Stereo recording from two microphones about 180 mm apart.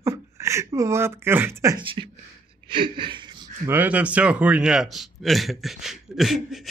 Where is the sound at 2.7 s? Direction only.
25° right (ahead or behind).